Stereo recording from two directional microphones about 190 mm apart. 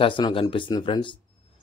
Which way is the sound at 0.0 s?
25° left (ahead or behind).